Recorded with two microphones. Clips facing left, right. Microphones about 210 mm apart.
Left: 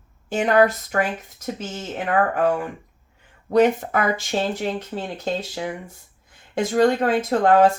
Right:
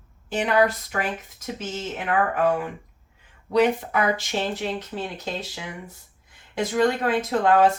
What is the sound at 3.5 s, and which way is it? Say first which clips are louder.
Speech: left 3 dB; 45° left (ahead or behind).